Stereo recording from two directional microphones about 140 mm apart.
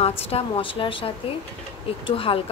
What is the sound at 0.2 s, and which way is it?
A woman's voice, 40° left (ahead or behind).